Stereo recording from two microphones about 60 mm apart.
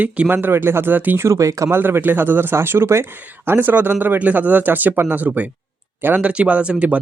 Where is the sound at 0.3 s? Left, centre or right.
Right.